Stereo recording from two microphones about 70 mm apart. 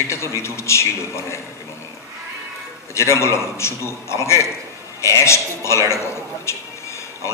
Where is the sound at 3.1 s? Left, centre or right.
Left.